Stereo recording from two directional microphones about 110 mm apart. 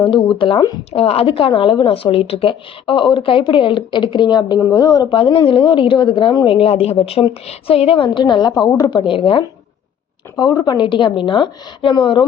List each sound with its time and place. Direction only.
0.3 s speech: 50° left (ahead or behind)
0.9 s speech: 65° left (ahead or behind); by 5.0 s 35° left (ahead or behind)
5.0 s a woman's voice: 50° left (ahead or behind); by 9.0 s 35° left (ahead or behind)
9.0 s speech: 50° left (ahead or behind)
10.3 s speech: 35° left (ahead or behind)